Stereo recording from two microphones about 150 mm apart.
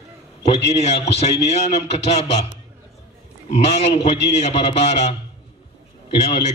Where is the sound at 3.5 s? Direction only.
45° left (ahead or behind).